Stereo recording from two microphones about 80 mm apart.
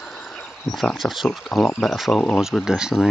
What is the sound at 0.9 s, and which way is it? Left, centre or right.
Speech, centre.